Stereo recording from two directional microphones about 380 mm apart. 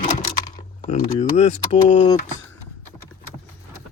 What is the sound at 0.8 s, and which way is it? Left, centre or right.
Speech, centre.